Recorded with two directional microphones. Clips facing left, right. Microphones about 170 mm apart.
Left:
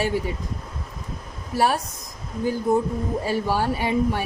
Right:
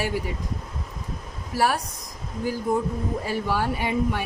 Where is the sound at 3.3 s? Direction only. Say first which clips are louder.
Left 3 dB; 30° left (ahead or behind).